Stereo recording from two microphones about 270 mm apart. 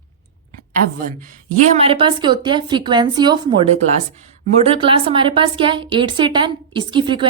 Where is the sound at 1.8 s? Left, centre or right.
Centre.